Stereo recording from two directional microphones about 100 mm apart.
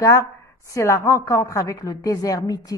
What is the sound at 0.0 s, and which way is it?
A woman's voice, 30° left (ahead or behind).